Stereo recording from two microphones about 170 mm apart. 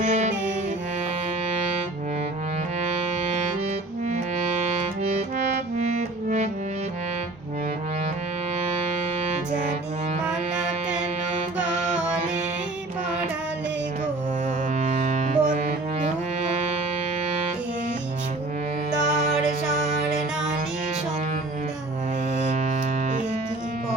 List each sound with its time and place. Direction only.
0.0 s music: 45° right (ahead or behind)
5.7 s music: 40° right (ahead or behind)
11.5 s music: 5° right (ahead or behind)
14.8 s music: 45° right (ahead or behind)